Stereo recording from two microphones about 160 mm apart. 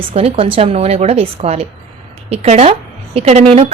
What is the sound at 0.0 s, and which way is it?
A woman's voice, 40° right (ahead or behind).